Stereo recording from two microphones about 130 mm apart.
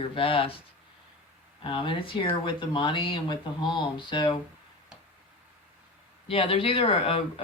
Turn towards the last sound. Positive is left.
turn(degrees=45)  # may be behind; listen again after turning